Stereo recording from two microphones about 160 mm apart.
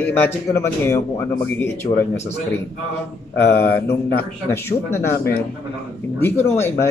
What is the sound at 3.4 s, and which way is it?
A man's voice, 15° left (ahead or behind).